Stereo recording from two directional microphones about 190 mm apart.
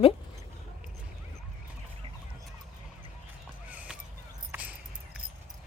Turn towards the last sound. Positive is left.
turn(degrees=-10)  # may be behind; listen again after turning